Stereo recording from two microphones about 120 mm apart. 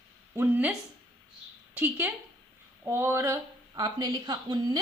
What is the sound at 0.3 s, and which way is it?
Speech, 15° right (ahead or behind).